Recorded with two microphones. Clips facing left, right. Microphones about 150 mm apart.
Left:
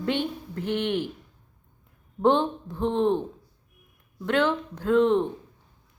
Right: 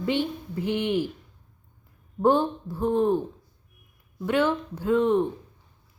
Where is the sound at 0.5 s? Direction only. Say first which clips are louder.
Right 2 dB; 10° right (ahead or behind).